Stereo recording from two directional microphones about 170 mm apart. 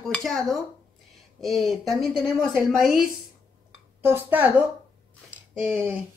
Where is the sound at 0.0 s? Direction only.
Centre (ahead or behind).